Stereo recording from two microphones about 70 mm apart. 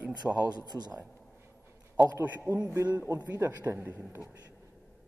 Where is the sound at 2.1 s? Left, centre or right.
Right.